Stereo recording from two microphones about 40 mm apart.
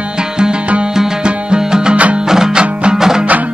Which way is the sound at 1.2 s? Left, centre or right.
Centre.